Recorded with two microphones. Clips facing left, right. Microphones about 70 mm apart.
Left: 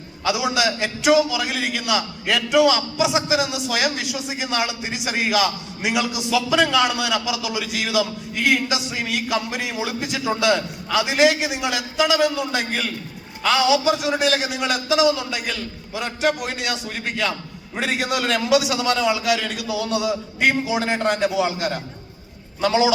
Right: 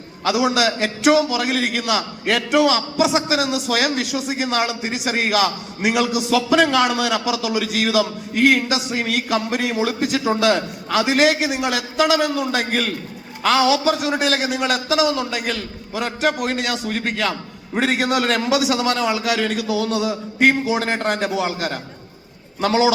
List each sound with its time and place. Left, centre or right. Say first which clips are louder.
0.3 s a man's voice: right 3 dB; right